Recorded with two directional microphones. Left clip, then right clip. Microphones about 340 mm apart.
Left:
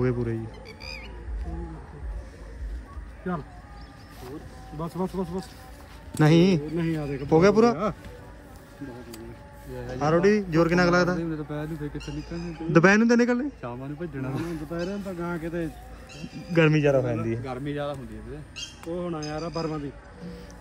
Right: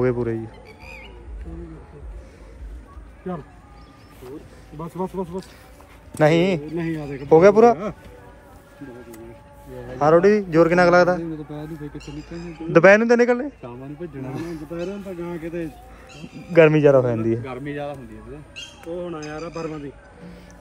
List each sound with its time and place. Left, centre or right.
0.0 s a man's voice: centre
4.7 s a man's voice: centre
6.1 s a man's voice: centre
6.6 s a man's voice: centre
9.9 s a man's voice: centre
14.8 s a man's voice: centre
16.5 s a man's voice: centre
18.6 s speech: centre
18.9 s a sound: left